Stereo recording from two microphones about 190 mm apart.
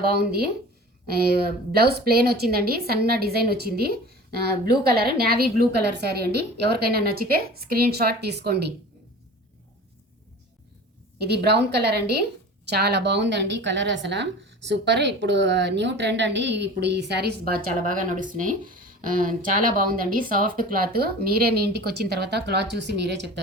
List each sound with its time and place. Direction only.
0.0 s a woman's voice: 55° right (ahead or behind)
11.2 s a woman's voice: 60° right (ahead or behind)